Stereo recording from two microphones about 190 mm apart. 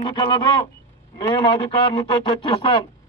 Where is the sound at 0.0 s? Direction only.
25° left (ahead or behind).